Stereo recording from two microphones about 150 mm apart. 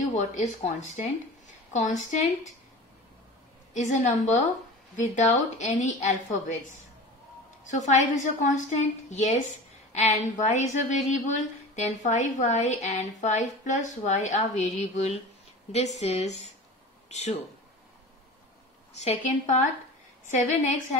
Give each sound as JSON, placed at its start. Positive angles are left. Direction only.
{"t": 0.0, "sound": "a woman's voice", "side_deg": 55}
{"t": 3.7, "sound": "a woman's voice", "side_deg": 55}
{"t": 7.6, "sound": "a woman's voice", "side_deg": 55}
{"t": 18.9, "sound": "a woman's voice", "side_deg": 50}